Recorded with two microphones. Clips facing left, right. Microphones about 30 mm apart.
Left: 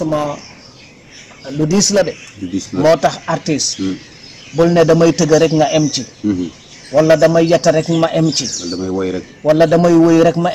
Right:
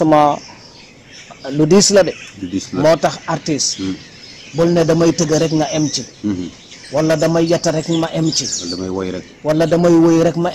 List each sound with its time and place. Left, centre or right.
0.0 s speech: right
1.4 s speech: centre
1.7 s speech: right
2.0 s speech: centre
2.8 s a man's voice: centre
6.2 s bird: centre
7.0 s a man's voice: centre
8.0 s speech: left
8.7 s a man's voice: centre